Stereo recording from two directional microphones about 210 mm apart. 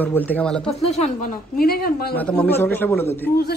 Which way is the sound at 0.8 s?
30° left (ahead or behind).